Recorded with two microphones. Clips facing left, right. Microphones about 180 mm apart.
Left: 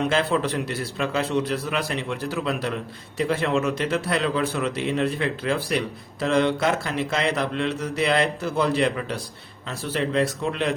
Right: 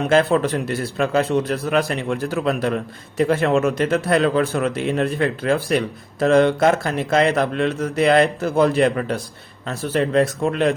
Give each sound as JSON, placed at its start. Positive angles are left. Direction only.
{"t": 0.1, "sound": "speech", "side_deg": -50}